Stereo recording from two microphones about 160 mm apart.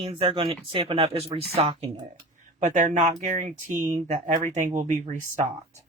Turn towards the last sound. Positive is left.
turn(degrees=-50)  # may be behind; listen again after turning